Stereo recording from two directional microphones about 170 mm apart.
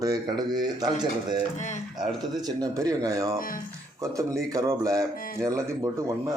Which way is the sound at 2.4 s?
20° right (ahead or behind).